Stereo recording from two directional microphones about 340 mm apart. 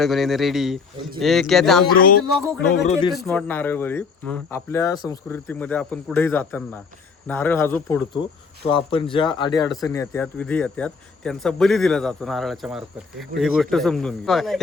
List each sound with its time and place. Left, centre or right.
0.0 s speech: centre
2.0 s speech: left
3.1 s speech: centre